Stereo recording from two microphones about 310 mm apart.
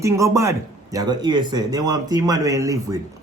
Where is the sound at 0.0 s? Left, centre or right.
Centre.